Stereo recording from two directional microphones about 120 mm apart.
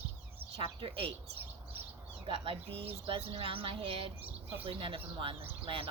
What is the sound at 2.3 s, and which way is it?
Speech, 55° right (ahead or behind).